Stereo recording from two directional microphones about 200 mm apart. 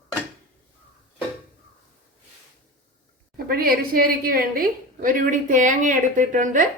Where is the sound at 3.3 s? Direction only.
45° right (ahead or behind).